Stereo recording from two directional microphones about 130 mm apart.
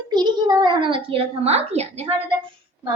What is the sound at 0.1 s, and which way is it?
A child's voice, 35° right (ahead or behind).